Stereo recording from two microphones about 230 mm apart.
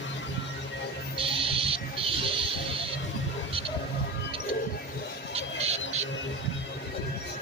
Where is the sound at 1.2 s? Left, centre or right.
Right.